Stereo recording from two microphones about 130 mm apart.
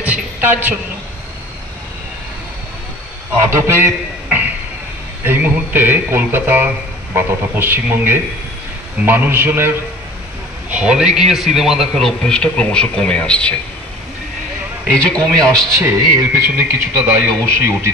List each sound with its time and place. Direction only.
0.0 s a sound: 10° right (ahead or behind)
3.3 s a man's voice: 20° right (ahead or behind); by 13.6 s 10° left (ahead or behind)
14.9 s a man's voice: 5° left (ahead or behind)
15.8 s speech: 20° right (ahead or behind)